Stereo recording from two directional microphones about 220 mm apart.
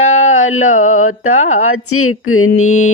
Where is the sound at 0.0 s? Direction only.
65° left (ahead or behind).